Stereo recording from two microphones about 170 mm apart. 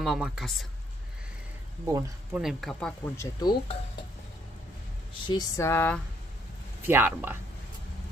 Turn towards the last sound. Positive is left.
turn(degrees=-10)  # may be behind; listen again after turning